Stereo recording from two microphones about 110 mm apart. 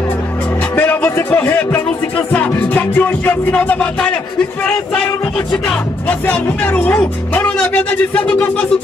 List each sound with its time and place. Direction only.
0.7 s a sound: 15° left (ahead or behind)
2.3 s music: 15° left (ahead or behind)
5.5 s music: 15° left (ahead or behind)